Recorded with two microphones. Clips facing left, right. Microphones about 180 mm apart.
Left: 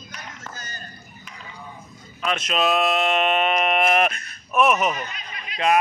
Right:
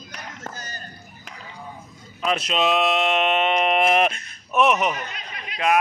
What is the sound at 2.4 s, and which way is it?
Speech, 25° right (ahead or behind).